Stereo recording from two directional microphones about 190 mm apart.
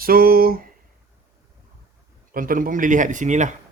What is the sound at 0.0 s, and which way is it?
Speech, 50° right (ahead or behind).